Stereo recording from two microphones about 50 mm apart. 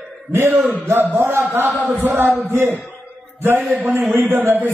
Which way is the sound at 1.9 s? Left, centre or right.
Right.